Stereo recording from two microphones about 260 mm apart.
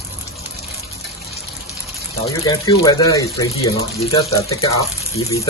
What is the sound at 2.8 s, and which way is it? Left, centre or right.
Speech, centre.